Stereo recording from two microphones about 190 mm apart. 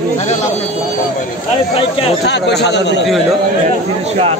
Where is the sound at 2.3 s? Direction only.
65° left (ahead or behind).